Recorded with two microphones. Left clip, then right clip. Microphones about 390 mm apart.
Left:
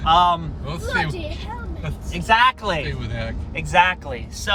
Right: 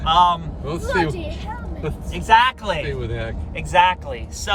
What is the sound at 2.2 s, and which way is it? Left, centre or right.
Speech, centre.